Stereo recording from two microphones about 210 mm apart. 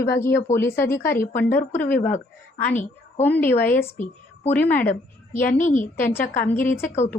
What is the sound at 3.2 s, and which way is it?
A woman's voice, 10° left (ahead or behind).